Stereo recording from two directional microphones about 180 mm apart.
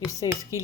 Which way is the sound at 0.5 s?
15° left (ahead or behind).